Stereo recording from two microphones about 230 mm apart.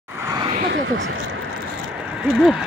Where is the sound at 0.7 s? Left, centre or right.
Right.